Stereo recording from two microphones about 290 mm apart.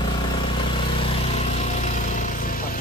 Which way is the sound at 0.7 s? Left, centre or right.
Centre.